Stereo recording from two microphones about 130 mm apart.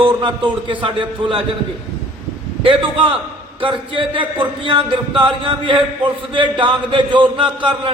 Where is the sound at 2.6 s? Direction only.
40° right (ahead or behind).